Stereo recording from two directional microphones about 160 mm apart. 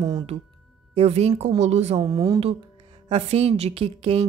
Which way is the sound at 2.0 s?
20° right (ahead or behind).